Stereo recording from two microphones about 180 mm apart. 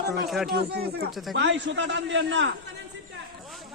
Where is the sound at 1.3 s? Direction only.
90° right.